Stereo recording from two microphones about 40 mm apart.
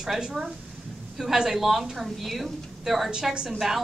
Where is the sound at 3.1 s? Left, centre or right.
Centre.